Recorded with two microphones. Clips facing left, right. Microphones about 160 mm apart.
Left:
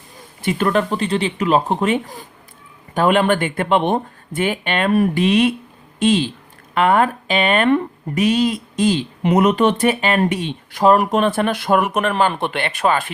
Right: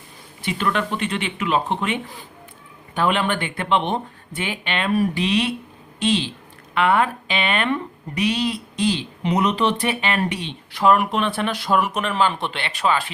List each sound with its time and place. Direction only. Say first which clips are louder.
0.4 s speech: left 5 dB; 45° left (ahead or behind)